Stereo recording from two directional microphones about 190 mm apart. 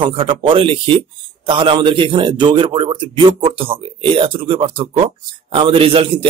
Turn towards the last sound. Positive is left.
turn(degrees=-30)  # may be behind; listen again after turning